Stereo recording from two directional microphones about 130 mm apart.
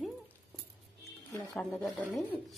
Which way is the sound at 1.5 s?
Centre (ahead or behind).